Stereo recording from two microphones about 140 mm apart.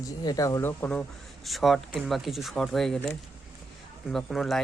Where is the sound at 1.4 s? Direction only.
Centre (ahead or behind).